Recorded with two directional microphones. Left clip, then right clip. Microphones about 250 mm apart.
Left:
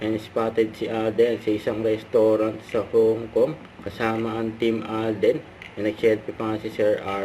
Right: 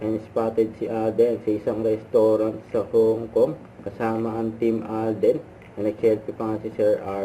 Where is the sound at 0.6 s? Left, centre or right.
Centre.